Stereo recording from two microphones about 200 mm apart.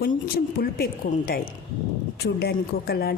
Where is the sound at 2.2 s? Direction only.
50° left (ahead or behind).